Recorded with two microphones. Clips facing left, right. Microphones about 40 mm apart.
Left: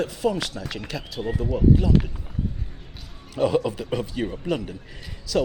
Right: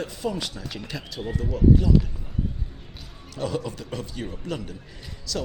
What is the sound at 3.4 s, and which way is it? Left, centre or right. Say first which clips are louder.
Speech: left 7 dB; centre.